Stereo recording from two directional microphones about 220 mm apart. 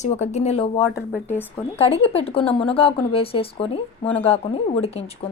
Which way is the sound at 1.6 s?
25° left (ahead or behind).